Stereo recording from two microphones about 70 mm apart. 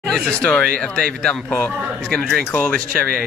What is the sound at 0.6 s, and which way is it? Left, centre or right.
Speech, centre.